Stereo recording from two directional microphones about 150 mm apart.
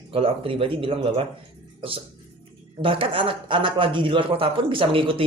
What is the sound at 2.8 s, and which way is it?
A man's voice, 35° right (ahead or behind).